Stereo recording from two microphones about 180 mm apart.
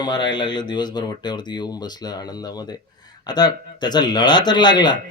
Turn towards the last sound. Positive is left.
turn(degrees=25)  # may be behind; listen again after turning